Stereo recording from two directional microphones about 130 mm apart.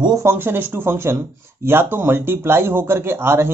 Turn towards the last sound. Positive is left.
turn(degrees=-20)  # may be behind; listen again after turning